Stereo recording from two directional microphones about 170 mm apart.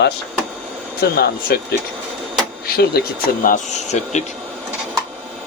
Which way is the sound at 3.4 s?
45° left (ahead or behind).